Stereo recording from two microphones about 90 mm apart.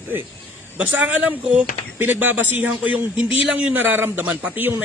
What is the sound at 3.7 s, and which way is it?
A man's voice, 20° right (ahead or behind).